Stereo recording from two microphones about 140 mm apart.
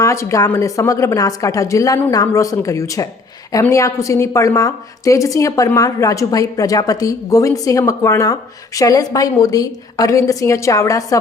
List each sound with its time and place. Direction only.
0.0 s a woman's voice: 20° left (ahead or behind)